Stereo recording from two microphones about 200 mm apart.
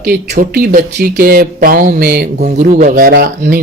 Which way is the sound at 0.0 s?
50° right (ahead or behind).